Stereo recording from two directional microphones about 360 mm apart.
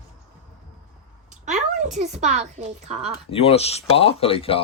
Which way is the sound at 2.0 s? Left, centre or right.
Centre.